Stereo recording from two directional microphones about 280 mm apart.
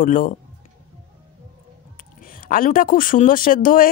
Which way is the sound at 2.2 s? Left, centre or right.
Left.